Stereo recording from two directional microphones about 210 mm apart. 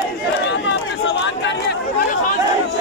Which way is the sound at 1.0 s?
60° left (ahead or behind).